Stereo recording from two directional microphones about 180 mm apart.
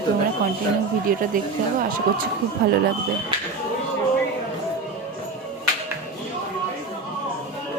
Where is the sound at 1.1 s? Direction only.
50° right (ahead or behind).